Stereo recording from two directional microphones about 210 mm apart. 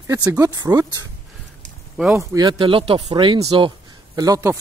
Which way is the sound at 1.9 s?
5° right (ahead or behind).